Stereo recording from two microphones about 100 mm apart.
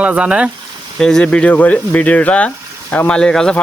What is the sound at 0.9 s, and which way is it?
Speech, 5° left (ahead or behind).